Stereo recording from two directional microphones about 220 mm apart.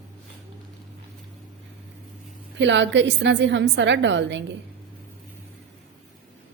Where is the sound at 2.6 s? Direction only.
55° right (ahead or behind).